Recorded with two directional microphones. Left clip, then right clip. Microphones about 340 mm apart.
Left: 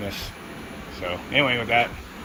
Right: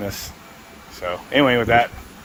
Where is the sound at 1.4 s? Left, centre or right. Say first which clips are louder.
Right 5 dB; centre.